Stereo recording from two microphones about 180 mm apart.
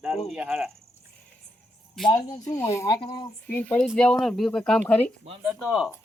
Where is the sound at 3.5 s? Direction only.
10° left (ahead or behind).